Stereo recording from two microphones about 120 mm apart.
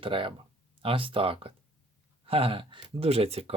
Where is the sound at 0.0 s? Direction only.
45° right (ahead or behind).